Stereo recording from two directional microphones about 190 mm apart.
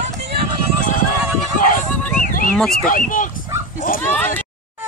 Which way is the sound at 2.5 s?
5° left (ahead or behind).